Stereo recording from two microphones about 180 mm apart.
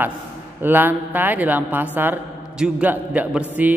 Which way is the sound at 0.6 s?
10° right (ahead or behind).